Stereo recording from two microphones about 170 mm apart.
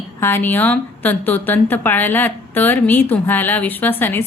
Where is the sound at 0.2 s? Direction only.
15° left (ahead or behind).